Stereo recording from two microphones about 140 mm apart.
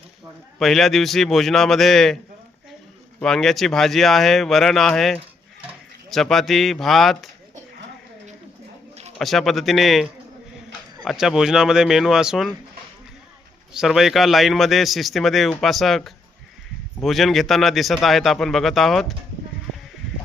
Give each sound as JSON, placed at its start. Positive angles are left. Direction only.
{"t": 0.6, "sound": "a man's voice", "side_deg": 0}
{"t": 3.2, "sound": "a man's voice", "side_deg": 5}
{"t": 9.1, "sound": "a man's voice", "side_deg": 0}
{"t": 13.7, "sound": "a man's voice", "side_deg": 0}